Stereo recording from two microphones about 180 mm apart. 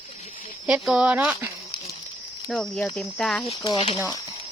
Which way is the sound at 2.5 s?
5° left (ahead or behind).